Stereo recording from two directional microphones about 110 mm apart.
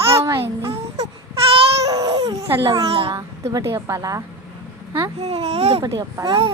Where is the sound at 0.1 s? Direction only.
25° right (ahead or behind).